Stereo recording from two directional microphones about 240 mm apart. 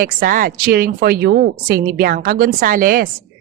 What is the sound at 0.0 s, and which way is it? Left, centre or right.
A woman's voice, right.